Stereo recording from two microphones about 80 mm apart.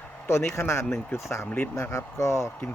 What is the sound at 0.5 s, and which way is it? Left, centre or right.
Speech, left.